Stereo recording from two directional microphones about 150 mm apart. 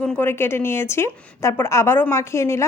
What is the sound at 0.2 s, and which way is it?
A woman's voice, 15° left (ahead or behind).